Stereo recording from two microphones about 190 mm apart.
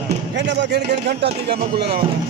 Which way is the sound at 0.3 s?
70° right (ahead or behind).